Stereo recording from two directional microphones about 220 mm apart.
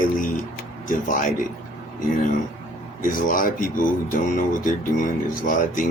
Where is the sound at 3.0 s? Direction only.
40° left (ahead or behind).